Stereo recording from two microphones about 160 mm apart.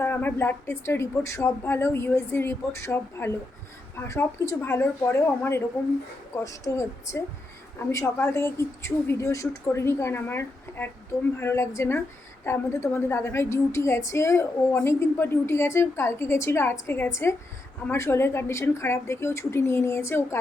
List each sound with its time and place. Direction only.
0.0 s a woman's voice: 10° left (ahead or behind)